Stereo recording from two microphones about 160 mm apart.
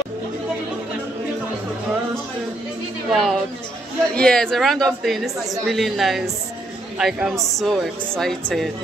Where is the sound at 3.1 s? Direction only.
Centre (ahead or behind).